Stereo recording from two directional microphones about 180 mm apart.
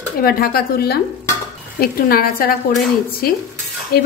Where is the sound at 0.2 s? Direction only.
55° left (ahead or behind).